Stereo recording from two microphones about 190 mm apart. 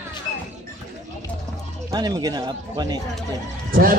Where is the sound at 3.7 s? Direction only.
50° right (ahead or behind).